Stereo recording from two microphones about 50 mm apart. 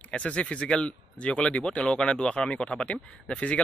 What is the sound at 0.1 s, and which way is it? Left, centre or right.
Speech, left.